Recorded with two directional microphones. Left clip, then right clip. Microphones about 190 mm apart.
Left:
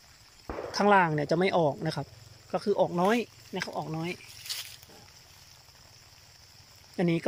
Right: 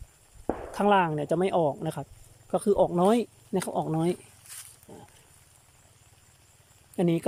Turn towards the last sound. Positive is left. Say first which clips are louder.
# right 2 dB
turn(degrees=-15)  # may be behind; listen again after turning